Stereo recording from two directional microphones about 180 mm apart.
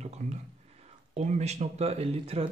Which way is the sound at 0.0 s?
40° right (ahead or behind).